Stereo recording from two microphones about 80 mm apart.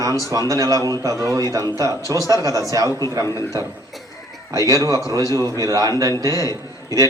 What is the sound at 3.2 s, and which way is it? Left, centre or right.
Speech, left.